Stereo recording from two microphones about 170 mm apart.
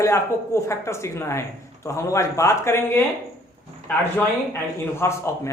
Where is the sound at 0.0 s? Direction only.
15° left (ahead or behind).